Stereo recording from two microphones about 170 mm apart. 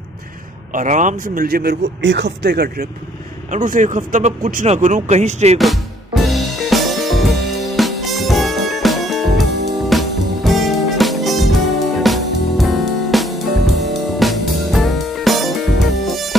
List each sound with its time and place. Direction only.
0.7 s speech: 50° right (ahead or behind); by 2.9 s 65° right (ahead or behind)
3.5 s speech: 50° right (ahead or behind)
5.6 s music: centre (ahead or behind)